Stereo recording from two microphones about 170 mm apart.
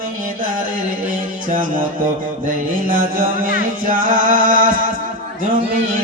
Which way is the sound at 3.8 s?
55° right (ahead or behind).